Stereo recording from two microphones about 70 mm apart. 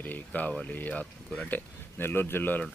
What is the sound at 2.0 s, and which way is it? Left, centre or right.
Speech, left.